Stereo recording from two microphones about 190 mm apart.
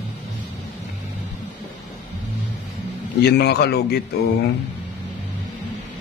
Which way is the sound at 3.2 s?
60° left (ahead or behind).